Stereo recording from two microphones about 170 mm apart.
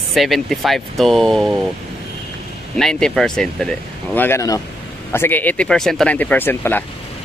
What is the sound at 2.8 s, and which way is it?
Speech, 5° left (ahead or behind).